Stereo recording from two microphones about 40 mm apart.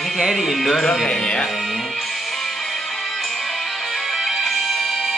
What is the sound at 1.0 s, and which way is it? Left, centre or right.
Speech, centre.